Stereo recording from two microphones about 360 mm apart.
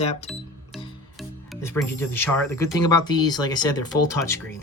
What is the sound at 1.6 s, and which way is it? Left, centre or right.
Speech, centre.